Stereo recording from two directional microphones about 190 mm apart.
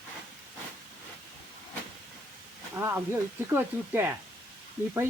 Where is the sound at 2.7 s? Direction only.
15° right (ahead or behind).